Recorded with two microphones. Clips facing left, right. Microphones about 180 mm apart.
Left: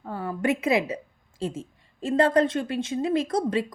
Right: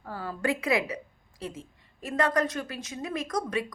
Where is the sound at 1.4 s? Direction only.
25° left (ahead or behind).